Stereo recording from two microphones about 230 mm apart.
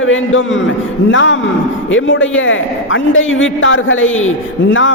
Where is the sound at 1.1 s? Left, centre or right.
Left.